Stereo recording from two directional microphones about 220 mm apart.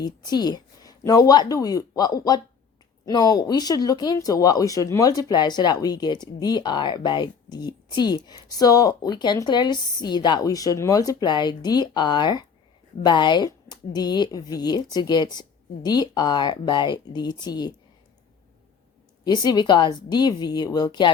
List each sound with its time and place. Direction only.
0.0 s a woman's voice: 20° left (ahead or behind)
19.2 s speech: 20° left (ahead or behind)